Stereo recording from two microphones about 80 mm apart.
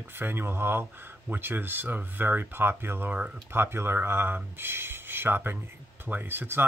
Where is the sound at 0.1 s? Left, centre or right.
Right.